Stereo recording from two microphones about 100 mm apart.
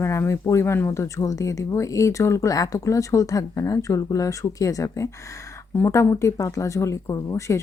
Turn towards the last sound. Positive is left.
turn(degrees=30)  # may be behind; listen again after turning